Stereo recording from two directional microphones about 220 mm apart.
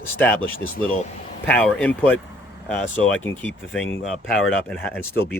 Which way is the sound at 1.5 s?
5° left (ahead or behind).